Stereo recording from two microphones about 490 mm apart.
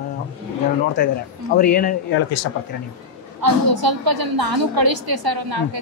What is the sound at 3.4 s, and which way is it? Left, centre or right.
A woman's voice, right.